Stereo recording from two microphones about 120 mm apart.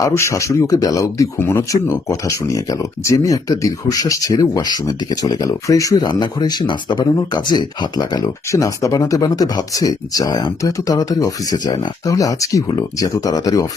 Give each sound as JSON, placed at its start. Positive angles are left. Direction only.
{"t": 0.0, "sound": "speech", "side_deg": 25}